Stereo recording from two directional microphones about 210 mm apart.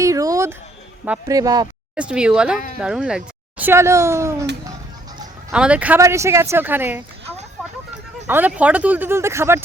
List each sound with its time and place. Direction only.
0.0 s speech: 15° right (ahead or behind)
2.0 s speech: 5° right (ahead or behind)
5.5 s speech: 5° right (ahead or behind)
8.3 s speech: 10° right (ahead or behind)